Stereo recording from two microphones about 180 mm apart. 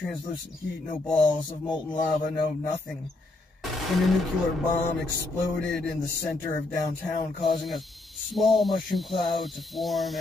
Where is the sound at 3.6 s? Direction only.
Centre (ahead or behind).